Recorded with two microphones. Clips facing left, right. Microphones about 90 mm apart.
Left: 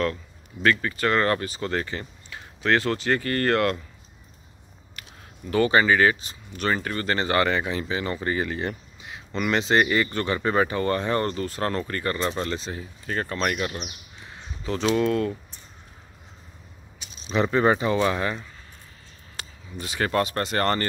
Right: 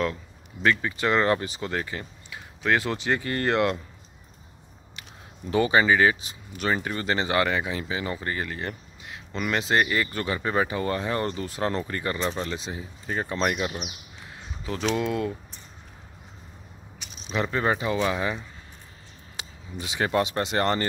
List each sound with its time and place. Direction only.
0.0 s speech: 15° right (ahead or behind)
1.7 s speech: 5° right (ahead or behind)
5.5 s speech: 10° right (ahead or behind)
8.2 s speech: 5° left (ahead or behind)
17.3 s speech: 5° left (ahead or behind); by 20.8 s 15° right (ahead or behind)